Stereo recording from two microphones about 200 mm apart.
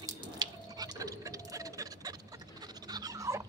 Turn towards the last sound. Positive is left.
turn(degrees=-15)  # may be behind; listen again after turning